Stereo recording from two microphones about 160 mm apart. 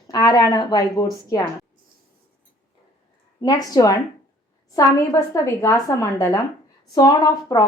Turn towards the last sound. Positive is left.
turn(degrees=25)  # may be behind; listen again after turning